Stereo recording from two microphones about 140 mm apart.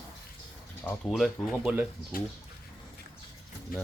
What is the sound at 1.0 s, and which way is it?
Speech, centre (ahead or behind).